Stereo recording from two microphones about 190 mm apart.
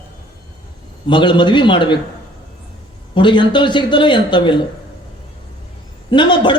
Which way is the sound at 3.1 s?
25° left (ahead or behind).